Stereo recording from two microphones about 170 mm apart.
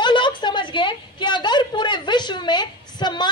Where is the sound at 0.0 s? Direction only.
25° left (ahead or behind).